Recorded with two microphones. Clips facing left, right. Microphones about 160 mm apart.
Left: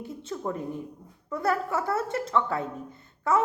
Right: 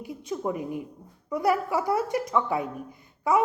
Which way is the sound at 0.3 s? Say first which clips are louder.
Right 3 dB; 15° right (ahead or behind).